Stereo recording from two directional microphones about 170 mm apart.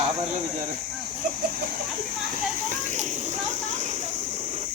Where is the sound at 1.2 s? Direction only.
55° right (ahead or behind).